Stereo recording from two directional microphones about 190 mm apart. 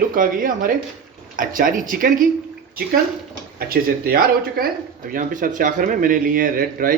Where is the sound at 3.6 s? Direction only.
50° right (ahead or behind).